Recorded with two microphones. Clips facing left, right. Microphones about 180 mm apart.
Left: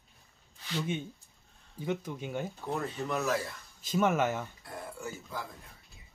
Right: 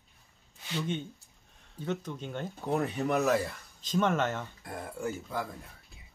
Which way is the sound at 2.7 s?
60° right (ahead or behind).